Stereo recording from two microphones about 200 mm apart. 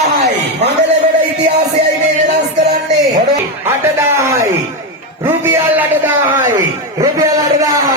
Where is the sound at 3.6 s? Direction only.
15° right (ahead or behind).